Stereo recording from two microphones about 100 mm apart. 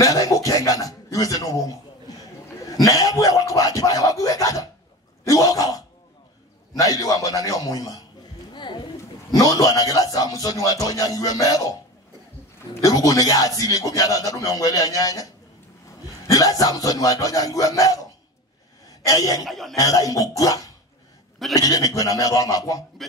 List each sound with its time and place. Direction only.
0.0 s a sound: 35° left (ahead or behind)
2.8 s a sound: 35° left (ahead or behind)
5.2 s speech: 35° left (ahead or behind)
8.5 s music: 50° left (ahead or behind)
9.3 s speech: 35° left (ahead or behind)
12.8 s speech: 35° left (ahead or behind)
16.3 s speech: 35° left (ahead or behind)
19.0 s speech: 35° left (ahead or behind)
19.4 s a man's voice: centre (ahead or behind)
19.7 s speech: 35° left (ahead or behind)